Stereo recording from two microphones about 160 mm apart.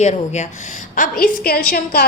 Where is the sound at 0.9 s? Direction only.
60° left (ahead or behind).